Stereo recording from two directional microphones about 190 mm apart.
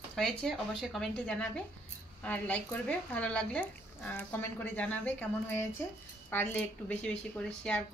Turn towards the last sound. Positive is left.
turn(degrees=5)  # may be behind; listen again after turning